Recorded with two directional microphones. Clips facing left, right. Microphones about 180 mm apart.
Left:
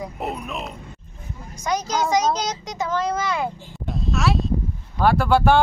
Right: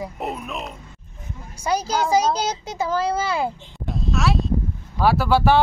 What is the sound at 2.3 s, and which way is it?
A child's voice, 30° right (ahead or behind).